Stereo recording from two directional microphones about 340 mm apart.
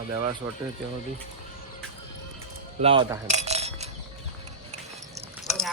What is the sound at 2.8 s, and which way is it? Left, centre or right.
Cutlery, centre.